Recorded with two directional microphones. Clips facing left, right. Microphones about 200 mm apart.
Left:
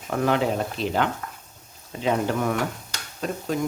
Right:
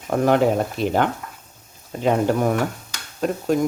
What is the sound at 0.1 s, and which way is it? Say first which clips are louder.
Speech: right 5 dB; 50° right (ahead or behind).